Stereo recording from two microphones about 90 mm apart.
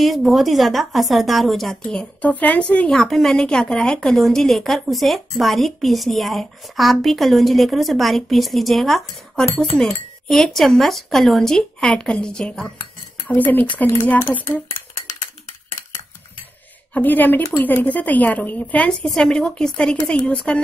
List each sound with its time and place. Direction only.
0.0 s speech: centre (ahead or behind)
13.3 s speech: 20° left (ahead or behind)
16.9 s speech: 20° left (ahead or behind)
19.0 s speech: 5° left (ahead or behind)